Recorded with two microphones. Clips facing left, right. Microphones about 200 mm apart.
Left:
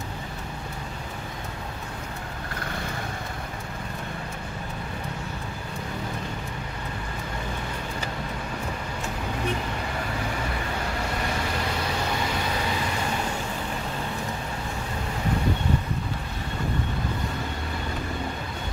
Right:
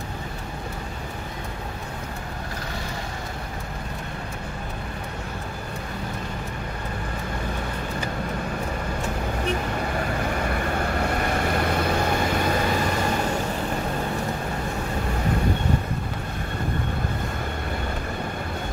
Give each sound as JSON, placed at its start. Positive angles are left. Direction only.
{"t": 11.0, "sound": "vehicle", "side_deg": -55}